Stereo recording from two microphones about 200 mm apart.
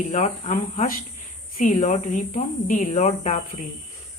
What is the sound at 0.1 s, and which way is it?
Speech, 40° left (ahead or behind).